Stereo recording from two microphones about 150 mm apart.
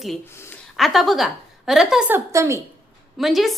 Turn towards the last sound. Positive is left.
turn(degrees=0)  # may be behind; listen again after turning